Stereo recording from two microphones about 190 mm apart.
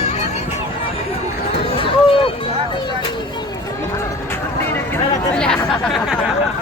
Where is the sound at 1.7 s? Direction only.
25° left (ahead or behind).